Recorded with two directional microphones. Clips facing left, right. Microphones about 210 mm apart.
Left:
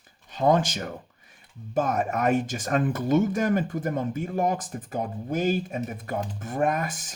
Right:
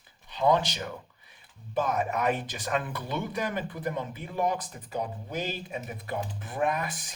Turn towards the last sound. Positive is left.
turn(degrees=45)  # may be behind; listen again after turning